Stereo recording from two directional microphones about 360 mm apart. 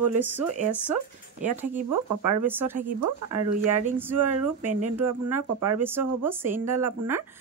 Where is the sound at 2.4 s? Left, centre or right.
Centre.